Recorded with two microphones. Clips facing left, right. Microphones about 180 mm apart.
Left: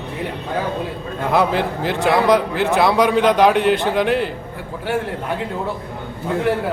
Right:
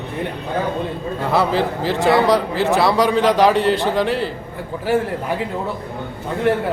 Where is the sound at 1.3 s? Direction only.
Centre (ahead or behind).